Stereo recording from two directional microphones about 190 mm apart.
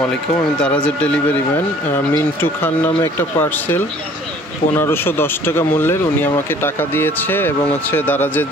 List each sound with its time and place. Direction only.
0.1 s speech: 5° left (ahead or behind)